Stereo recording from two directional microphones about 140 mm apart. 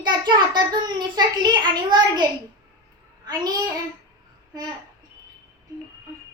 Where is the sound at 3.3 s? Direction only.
30° right (ahead or behind).